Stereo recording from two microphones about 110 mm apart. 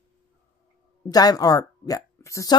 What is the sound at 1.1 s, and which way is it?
Speech, 35° left (ahead or behind).